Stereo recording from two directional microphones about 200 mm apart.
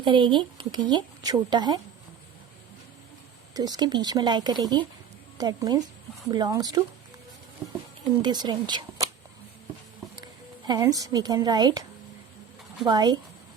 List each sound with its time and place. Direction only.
0.0 s speech: 25° right (ahead or behind)
3.5 s speech: 20° right (ahead or behind)
8.2 s speech: 20° right (ahead or behind)
10.7 s speech: 20° right (ahead or behind)